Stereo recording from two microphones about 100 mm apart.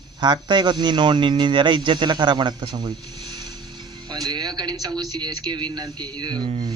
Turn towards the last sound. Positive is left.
turn(degrees=-45)  # may be behind; listen again after turning